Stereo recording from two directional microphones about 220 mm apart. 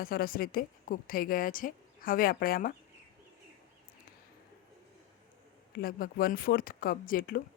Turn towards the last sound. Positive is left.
turn(degrees=40)  # may be behind; listen again after turning